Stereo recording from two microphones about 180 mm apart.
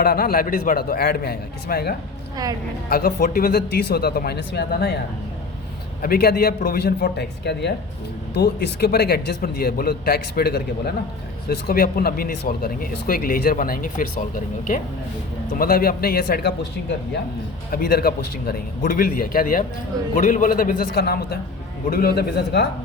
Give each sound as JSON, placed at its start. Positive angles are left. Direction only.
{"t": 0.0, "sound": "a man's voice", "side_deg": 55}
{"t": 2.3, "sound": "a woman's voice", "side_deg": -20}
{"t": 2.9, "sound": "a man's voice", "side_deg": 50}
{"t": 6.0, "sound": "a man's voice", "side_deg": 55}
{"t": 17.7, "sound": "a man's voice", "side_deg": 55}